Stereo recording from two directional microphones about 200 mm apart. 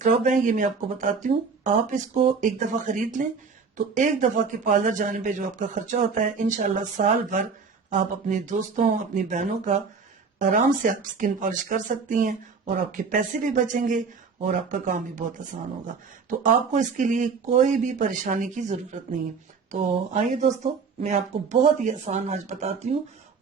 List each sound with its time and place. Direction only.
0.0 s a man's voice: 40° right (ahead or behind)
16.4 s a man's voice: 40° right (ahead or behind)